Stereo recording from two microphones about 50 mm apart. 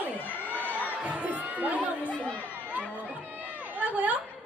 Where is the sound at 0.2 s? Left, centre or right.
Left.